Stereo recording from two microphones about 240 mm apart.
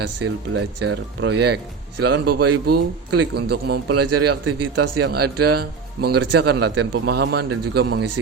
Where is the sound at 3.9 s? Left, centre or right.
Right.